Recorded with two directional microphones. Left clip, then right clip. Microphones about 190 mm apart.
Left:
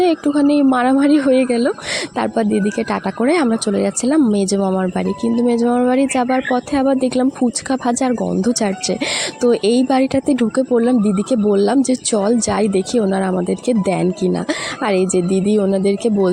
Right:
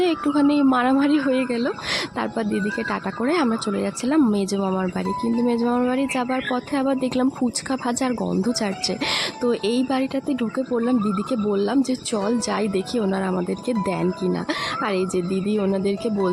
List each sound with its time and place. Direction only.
0.0 s speech: 20° left (ahead or behind)